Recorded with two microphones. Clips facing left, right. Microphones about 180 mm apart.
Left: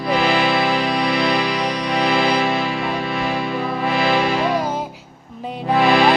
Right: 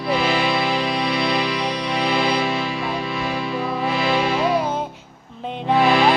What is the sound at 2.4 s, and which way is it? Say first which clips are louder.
Music: left 3 dB; 65° left (ahead or behind).